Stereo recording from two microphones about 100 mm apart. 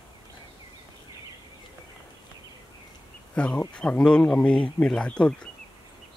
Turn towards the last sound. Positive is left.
turn(degrees=10)  # may be behind; listen again after turning